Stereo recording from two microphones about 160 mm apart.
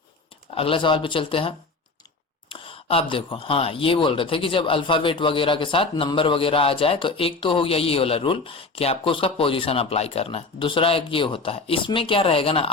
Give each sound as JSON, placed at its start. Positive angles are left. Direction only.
{"t": 0.5, "sound": "speech", "side_deg": 35}